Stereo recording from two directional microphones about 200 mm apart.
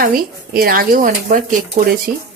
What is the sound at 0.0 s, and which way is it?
Speech, 45° right (ahead or behind).